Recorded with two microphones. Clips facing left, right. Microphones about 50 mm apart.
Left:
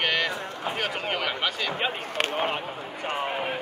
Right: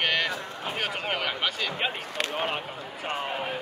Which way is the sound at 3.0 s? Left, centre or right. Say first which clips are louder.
Left 2 dB; left.